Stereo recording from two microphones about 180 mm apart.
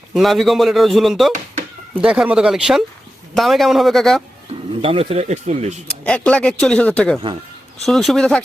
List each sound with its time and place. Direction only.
0.1 s speech: centre (ahead or behind)
4.8 s speech: 30° right (ahead or behind)
6.1 s speech: 5° left (ahead or behind)